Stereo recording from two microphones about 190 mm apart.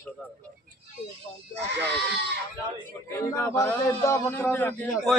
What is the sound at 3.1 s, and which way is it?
A man's voice, 15° left (ahead or behind).